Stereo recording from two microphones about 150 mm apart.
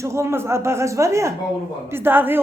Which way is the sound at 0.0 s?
20° right (ahead or behind).